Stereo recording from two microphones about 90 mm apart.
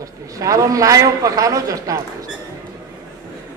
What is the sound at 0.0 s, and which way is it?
A man's voice, 40° right (ahead or behind).